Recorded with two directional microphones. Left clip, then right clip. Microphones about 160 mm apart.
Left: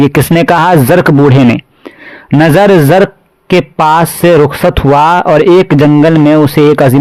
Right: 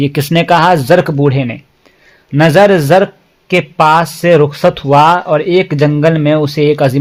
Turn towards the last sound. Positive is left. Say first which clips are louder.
# left 5 dB
turn(degrees=55)  # may be behind; listen again after turning